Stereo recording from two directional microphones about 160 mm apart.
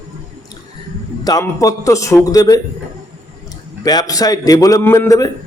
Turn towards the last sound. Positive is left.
turn(degrees=20)  # may be behind; listen again after turning